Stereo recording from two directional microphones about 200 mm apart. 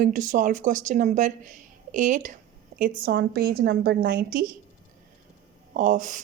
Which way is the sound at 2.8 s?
50° right (ahead or behind).